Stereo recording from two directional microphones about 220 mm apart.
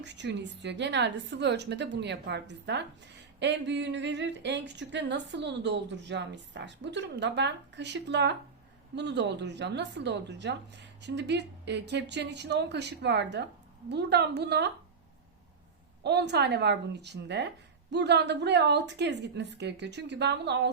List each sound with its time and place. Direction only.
0.0 s speech: 50° right (ahead or behind)
16.0 s speech: 50° right (ahead or behind)